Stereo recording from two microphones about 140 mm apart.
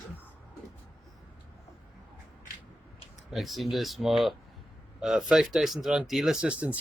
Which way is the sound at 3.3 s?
Centre (ahead or behind).